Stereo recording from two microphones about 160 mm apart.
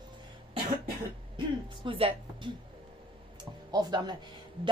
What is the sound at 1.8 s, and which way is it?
Speech, 35° right (ahead or behind).